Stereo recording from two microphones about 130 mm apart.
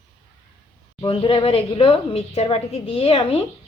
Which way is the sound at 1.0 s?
45° left (ahead or behind).